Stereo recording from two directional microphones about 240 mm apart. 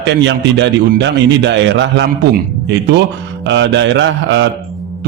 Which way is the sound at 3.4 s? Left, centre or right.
Right.